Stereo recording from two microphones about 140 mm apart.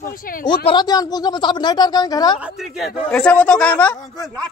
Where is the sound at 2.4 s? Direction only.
Centre (ahead or behind).